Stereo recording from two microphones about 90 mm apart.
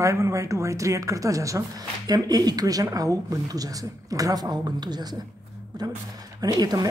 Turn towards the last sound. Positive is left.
turn(degrees=-45)  # may be behind; listen again after turning